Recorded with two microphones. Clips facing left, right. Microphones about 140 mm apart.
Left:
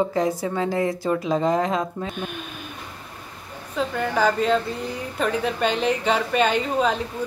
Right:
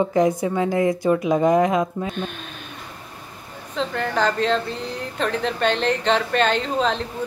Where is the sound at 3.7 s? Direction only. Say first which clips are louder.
Even; 5° left (ahead or behind).